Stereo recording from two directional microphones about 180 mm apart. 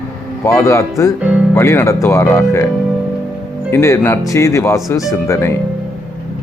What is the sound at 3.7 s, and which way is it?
Speech, 15° left (ahead or behind).